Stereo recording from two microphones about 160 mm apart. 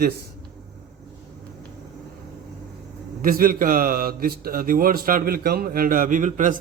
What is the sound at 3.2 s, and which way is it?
Speech, 65° right (ahead or behind).